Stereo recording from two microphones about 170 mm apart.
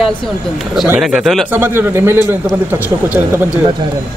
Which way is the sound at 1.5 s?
10° right (ahead or behind).